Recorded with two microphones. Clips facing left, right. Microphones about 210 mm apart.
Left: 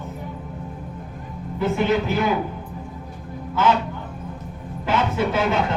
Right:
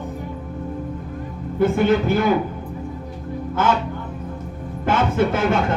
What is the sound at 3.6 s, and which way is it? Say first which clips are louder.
Speech: left 1 dB; 50° right (ahead or behind).